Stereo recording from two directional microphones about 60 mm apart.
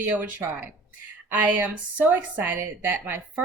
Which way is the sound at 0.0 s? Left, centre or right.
Right.